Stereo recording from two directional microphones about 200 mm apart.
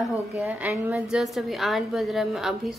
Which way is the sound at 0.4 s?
10° right (ahead or behind).